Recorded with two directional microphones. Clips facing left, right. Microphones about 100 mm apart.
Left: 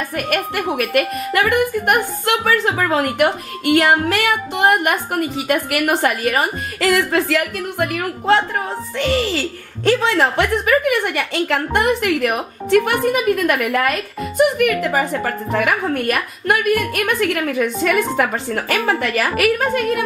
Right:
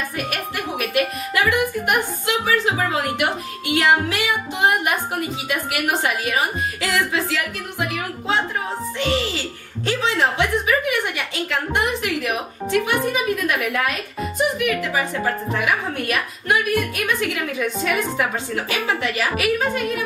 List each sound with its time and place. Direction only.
0.3 s a woman's voice: 55° left (ahead or behind)